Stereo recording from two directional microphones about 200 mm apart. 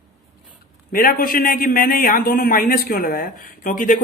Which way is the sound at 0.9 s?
45° left (ahead or behind).